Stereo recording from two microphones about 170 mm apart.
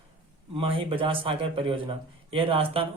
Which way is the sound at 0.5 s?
30° right (ahead or behind).